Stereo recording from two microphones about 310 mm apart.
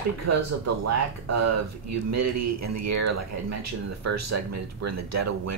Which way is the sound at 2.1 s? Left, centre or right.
Right.